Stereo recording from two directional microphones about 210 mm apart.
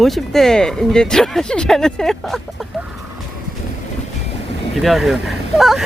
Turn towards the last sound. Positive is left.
turn(degrees=0)  # may be behind; listen again after turning